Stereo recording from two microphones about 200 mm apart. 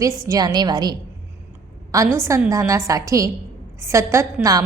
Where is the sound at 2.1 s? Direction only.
15° right (ahead or behind).